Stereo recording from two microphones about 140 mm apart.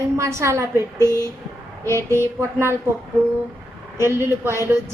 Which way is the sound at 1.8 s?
15° left (ahead or behind).